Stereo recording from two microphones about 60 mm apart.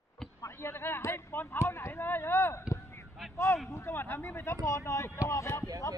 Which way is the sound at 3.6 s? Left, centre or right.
Left.